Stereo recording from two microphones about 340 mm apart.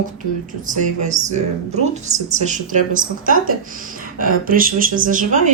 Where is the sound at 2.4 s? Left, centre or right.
Right.